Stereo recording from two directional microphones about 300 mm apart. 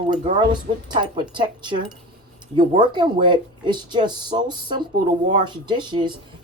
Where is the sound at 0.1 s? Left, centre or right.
Centre.